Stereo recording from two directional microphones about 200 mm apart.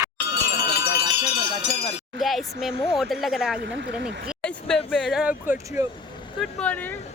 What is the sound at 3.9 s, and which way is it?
Speech, 55° right (ahead or behind).